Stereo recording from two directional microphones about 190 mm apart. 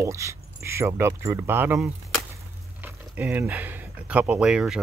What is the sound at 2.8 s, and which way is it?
Speech, 10° right (ahead or behind).